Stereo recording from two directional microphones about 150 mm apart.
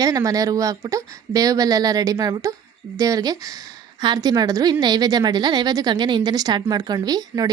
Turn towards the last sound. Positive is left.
turn(degrees=-25)  # may be behind; listen again after turning